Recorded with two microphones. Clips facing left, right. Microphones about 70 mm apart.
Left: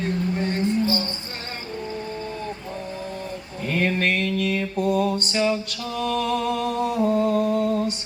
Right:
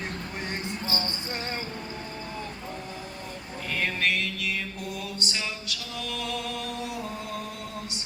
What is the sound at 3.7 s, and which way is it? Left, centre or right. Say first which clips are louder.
Mantra: left 6 dB; left.